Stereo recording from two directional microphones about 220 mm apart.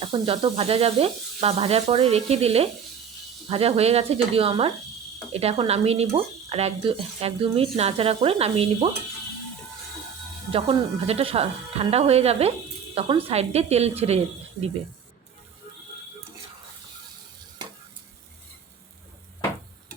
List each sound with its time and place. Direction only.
0.1 s speech: 25° right (ahead or behind)
10.5 s speech: 25° right (ahead or behind)